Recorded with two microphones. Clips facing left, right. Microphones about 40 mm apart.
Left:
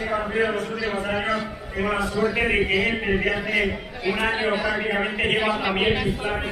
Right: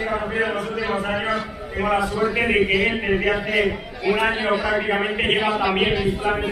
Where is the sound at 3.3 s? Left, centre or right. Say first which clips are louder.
Right 3 dB; centre.